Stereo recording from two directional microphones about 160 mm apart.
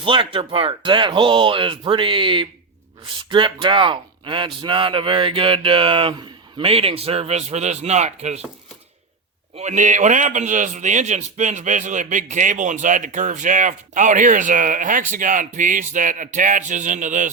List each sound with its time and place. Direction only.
0.0 s a man's voice: 30° right (ahead or behind)
9.6 s a man's voice: 50° right (ahead or behind)